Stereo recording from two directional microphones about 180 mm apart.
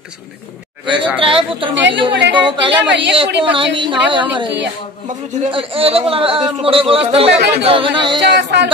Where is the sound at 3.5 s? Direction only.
30° right (ahead or behind).